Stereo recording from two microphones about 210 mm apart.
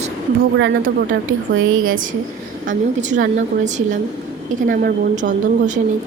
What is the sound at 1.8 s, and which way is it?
Speech, 40° right (ahead or behind).